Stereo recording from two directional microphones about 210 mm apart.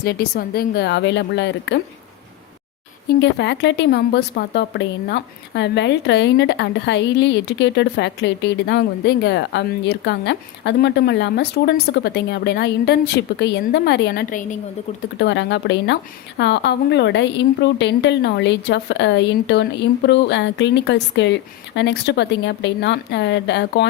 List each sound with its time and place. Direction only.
0.0 s a woman's voice: 45° left (ahead or behind)
3.2 s speech: 55° left (ahead or behind); by 14.6 s 40° left (ahead or behind)
15.2 s speech: 55° left (ahead or behind)